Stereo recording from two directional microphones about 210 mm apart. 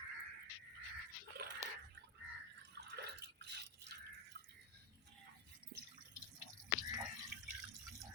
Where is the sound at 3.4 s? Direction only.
55° right (ahead or behind).